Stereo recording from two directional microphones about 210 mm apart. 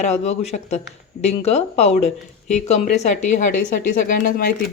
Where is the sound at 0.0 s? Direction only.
30° left (ahead or behind).